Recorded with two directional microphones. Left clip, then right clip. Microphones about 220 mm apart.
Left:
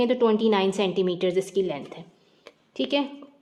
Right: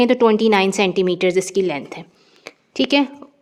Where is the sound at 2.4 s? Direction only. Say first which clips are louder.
Right 9 dB; 35° right (ahead or behind).